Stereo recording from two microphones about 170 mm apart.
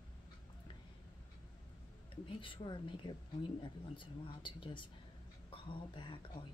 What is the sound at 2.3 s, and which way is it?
Speech, 30° left (ahead or behind).